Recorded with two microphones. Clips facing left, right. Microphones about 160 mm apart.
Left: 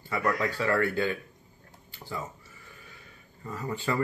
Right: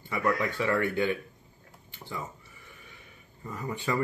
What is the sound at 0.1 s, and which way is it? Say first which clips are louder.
Speech: even; 20° right (ahead or behind).